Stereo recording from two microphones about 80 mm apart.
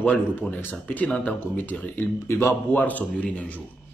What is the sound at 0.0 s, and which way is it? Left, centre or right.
A man's voice, centre.